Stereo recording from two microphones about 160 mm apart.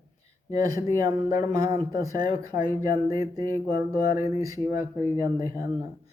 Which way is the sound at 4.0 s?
60° left (ahead or behind).